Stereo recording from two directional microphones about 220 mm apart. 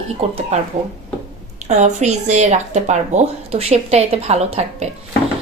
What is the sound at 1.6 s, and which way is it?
Speech, 30° right (ahead or behind).